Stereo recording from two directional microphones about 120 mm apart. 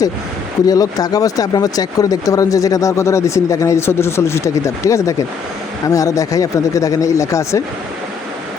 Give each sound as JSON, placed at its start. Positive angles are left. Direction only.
{"t": 0.7, "sound": "speech", "side_deg": 30}